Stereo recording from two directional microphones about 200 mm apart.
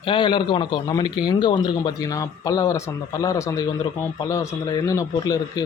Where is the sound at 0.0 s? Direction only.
25° left (ahead or behind).